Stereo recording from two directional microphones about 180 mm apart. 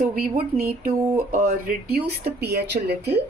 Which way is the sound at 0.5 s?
55° right (ahead or behind).